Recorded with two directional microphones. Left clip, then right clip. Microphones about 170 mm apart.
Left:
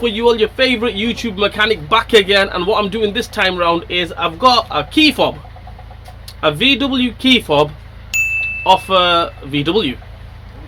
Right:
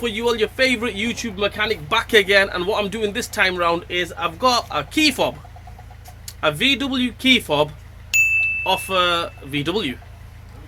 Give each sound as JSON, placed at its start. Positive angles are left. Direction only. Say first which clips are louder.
{"t": 0.0, "sound": "speech", "louder": "left 7 dB", "side_deg": 5}
{"t": 8.1, "sound": "chime", "louder": "even", "side_deg": 0}